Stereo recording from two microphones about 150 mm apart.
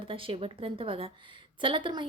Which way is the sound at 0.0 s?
35° right (ahead or behind).